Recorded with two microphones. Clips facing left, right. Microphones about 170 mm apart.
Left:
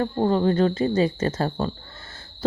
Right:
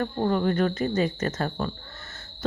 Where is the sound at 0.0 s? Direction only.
25° left (ahead or behind).